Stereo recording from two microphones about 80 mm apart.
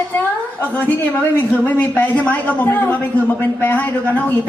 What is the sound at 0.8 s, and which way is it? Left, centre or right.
A man's voice, left.